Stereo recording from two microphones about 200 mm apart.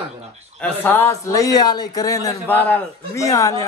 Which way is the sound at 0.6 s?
10° left (ahead or behind).